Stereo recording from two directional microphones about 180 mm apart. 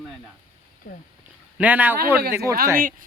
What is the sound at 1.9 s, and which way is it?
Speech, 55° right (ahead or behind).